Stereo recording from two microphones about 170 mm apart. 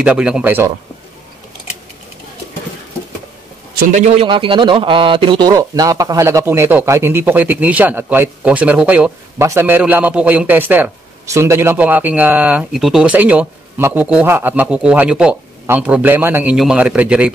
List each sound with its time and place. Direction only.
0.0 s speech: 5° right (ahead or behind)
3.9 s a man's voice: 45° right (ahead or behind)
4.2 s speech: 30° right (ahead or behind); by 17.3 s 5° right (ahead or behind)